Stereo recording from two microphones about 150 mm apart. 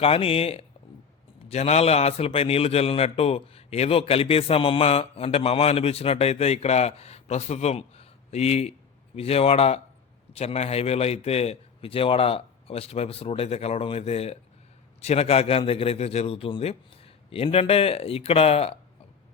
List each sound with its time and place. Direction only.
0.0 s a man's voice: 40° left (ahead or behind)